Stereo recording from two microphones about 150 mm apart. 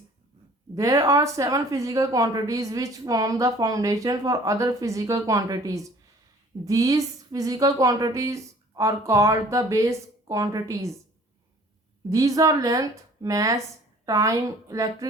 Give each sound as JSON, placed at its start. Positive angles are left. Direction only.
{"t": 0.8, "sound": "speech", "side_deg": -20}
{"t": 12.1, "sound": "speech", "side_deg": -20}